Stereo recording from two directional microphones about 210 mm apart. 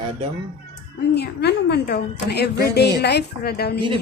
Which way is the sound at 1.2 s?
50° left (ahead or behind).